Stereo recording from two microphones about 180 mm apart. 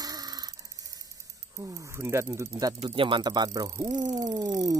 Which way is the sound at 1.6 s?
20° right (ahead or behind).